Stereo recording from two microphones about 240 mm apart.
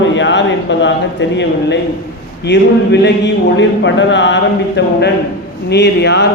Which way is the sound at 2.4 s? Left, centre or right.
Left.